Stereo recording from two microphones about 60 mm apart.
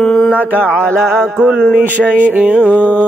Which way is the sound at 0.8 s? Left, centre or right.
Right.